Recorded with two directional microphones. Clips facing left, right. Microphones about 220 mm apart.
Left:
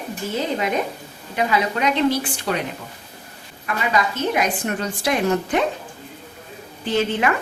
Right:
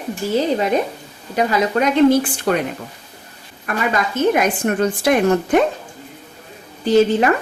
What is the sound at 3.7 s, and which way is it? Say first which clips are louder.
A woman's voice: right 2 dB; 50° right (ahead or behind).